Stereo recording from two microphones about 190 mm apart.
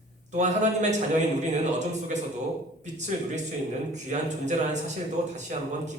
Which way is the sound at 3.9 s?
40° right (ahead or behind).